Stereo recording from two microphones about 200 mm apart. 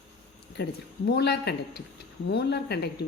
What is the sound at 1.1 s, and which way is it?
Speech, 55° left (ahead or behind).